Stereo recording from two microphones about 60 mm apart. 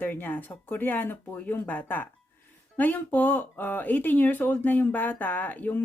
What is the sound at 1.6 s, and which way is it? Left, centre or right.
Speech, left.